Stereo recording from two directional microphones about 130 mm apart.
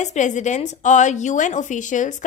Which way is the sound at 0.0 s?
65° left (ahead or behind).